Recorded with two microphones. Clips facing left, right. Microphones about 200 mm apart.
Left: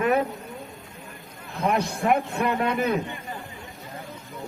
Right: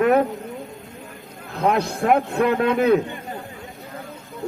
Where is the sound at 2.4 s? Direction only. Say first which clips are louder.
Right 6 dB; 85° right.